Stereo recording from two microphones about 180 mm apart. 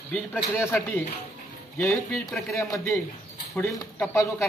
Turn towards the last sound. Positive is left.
turn(degrees=10)  # may be behind; listen again after turning